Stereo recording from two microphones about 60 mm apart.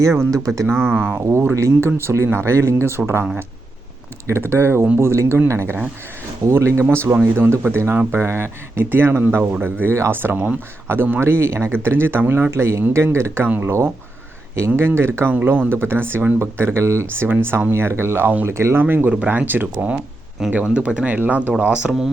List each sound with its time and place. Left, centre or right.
0.0 s speech: right
0.3 s speech: right
0.7 s speech: right
1.5 s speech: right
2.0 s speech: right
4.3 s speech: right
6.9 s speech: right
12.5 s speech: right
15.3 s speech: right
18.8 s speech: right
19.1 s speech: right
21.6 s speech: centre